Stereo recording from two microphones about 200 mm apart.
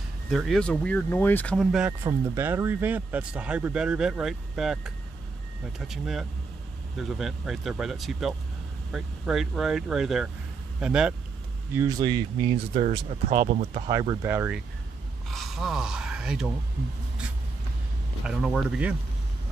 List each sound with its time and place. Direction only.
0.3 s speech: centre (ahead or behind)
1.9 s speech: 15° right (ahead or behind)
11.7 s speech: 15° right (ahead or behind); by 13.8 s 35° right (ahead or behind)
13.8 s speech: 15° right (ahead or behind)
15.2 s speech: centre (ahead or behind)
18.2 s speech: 5° right (ahead or behind)